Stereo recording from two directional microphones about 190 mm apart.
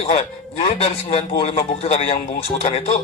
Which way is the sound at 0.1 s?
35° left (ahead or behind).